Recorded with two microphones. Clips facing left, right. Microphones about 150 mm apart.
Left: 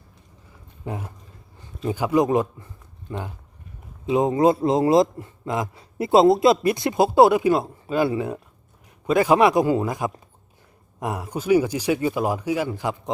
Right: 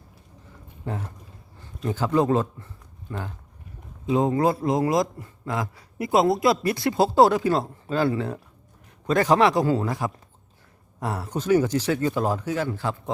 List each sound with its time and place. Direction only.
0.9 s a man's voice: 10° left (ahead or behind)